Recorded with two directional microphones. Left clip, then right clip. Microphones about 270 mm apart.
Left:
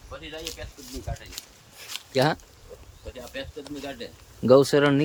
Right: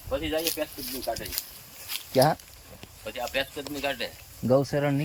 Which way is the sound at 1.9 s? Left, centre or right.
Centre.